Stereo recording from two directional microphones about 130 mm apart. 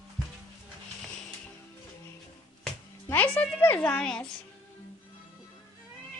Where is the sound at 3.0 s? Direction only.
10° left (ahead or behind).